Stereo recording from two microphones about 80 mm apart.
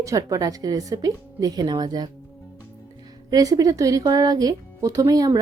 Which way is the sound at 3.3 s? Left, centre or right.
Right.